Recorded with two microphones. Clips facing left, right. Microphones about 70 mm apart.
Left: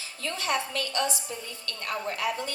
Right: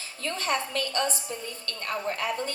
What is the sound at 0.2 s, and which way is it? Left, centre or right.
A woman's voice, right.